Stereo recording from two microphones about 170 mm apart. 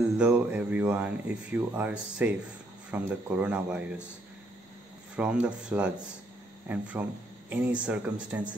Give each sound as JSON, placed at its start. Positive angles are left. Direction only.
{"t": 0.2, "sound": "speech", "side_deg": -5}
{"t": 5.1, "sound": "speech", "side_deg": -5}